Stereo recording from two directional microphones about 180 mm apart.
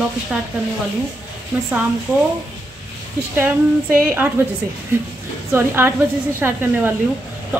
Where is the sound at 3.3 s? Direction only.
10° right (ahead or behind).